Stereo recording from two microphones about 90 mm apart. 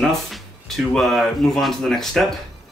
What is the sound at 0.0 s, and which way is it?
Speech, centre (ahead or behind).